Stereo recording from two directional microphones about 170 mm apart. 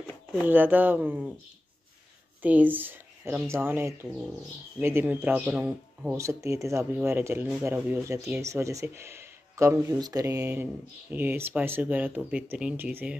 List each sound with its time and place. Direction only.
0.3 s speech: 10° right (ahead or behind)
2.4 s speech: 10° right (ahead or behind)
6.1 s speech: 15° right (ahead or behind)